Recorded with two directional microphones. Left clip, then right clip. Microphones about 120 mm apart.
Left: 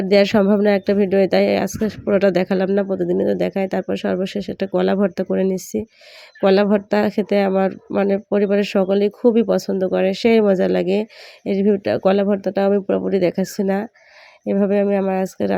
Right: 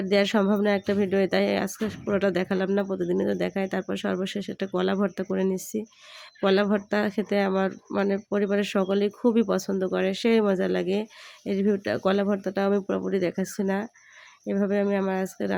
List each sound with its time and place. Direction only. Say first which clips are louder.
0.0 s speech: left 8 dB; 40° left (ahead or behind)
2.8 s speech: left 7 dB; 30° left (ahead or behind)